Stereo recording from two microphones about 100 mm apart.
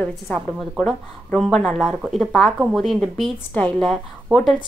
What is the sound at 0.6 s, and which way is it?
Speech, 5° left (ahead or behind).